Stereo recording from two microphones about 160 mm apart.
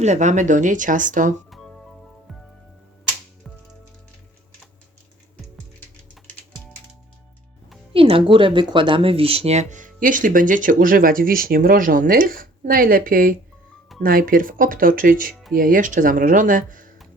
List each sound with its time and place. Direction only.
0.0 s speech: 45° right (ahead or behind)
1.5 s music: centre (ahead or behind)
7.9 s speech: 35° right (ahead or behind); by 16.9 s 55° right (ahead or behind)